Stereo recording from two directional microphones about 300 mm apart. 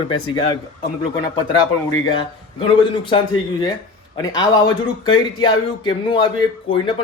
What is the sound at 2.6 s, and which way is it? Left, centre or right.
Speech, centre.